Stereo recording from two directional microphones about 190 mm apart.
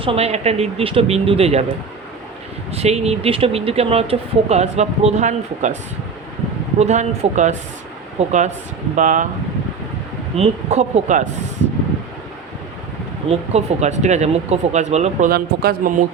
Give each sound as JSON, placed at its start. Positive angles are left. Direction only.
{"t": 0.0, "sound": "speech", "side_deg": -30}
{"t": 2.7, "sound": "speech", "side_deg": -35}
{"t": 6.7, "sound": "speech", "side_deg": -35}
{"t": 10.3, "sound": "speech", "side_deg": -35}
{"t": 13.5, "sound": "speech", "side_deg": -35}
{"t": 15.3, "sound": "speech", "side_deg": -50}